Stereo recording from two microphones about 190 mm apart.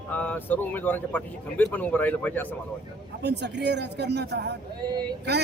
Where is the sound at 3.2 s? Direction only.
65° right (ahead or behind).